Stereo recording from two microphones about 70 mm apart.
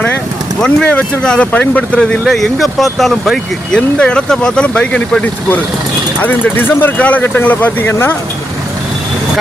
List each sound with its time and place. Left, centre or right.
0.6 s speech: centre
2.2 s speech: centre
3.7 s speech: centre; by 8.1 s left